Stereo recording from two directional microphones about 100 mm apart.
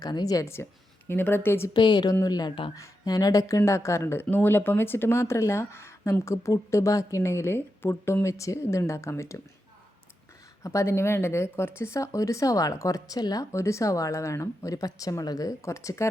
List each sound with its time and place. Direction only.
0.0 s speech: 40° left (ahead or behind); by 1.7 s 25° left (ahead or behind)
1.7 s a woman's voice: 45° left (ahead or behind); by 9.4 s 30° left (ahead or behind)
10.6 s speech: 30° left (ahead or behind)